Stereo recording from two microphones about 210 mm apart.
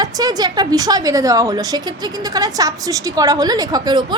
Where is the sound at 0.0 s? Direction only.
15° right (ahead or behind).